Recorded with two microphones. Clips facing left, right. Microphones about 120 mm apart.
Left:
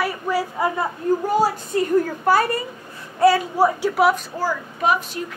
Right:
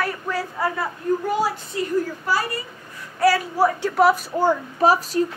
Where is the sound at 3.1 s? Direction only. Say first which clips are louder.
Left 3 dB; 20° left (ahead or behind).